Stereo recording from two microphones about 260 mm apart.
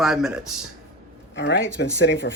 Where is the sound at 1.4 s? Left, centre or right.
Left.